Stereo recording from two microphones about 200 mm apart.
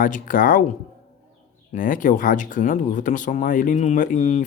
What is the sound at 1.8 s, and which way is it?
Speech, 40° left (ahead or behind).